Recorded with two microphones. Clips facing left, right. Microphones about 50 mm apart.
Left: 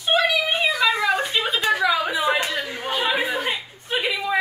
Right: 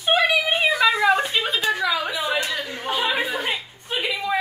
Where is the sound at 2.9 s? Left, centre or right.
Centre.